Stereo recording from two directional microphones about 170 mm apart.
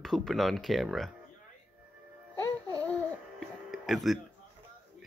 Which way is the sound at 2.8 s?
5° left (ahead or behind).